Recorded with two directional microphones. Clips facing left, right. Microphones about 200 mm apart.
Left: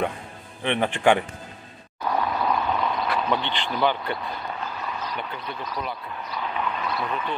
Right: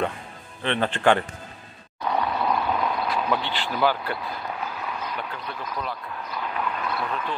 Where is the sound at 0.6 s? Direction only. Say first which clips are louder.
Left 1 dB; 15° left (ahead or behind).